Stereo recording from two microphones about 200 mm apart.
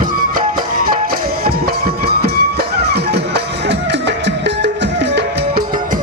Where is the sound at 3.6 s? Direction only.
60° right (ahead or behind).